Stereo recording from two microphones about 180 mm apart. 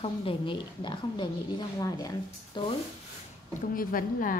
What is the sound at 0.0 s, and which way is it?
A woman's voice, 30° left (ahead or behind).